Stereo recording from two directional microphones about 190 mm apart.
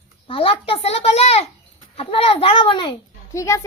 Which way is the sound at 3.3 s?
15° left (ahead or behind).